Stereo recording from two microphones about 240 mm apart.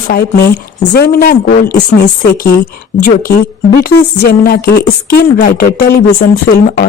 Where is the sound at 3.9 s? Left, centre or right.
Left.